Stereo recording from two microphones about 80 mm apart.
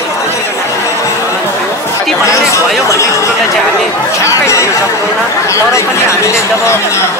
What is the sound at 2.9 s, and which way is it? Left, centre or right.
Speech, left.